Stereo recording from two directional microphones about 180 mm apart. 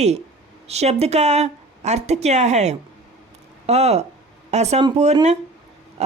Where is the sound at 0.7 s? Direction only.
35° right (ahead or behind).